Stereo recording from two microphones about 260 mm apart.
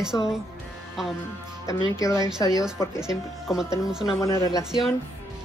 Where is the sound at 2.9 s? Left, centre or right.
Centre.